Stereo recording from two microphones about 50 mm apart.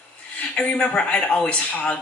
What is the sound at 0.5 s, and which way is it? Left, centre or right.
Speech, left.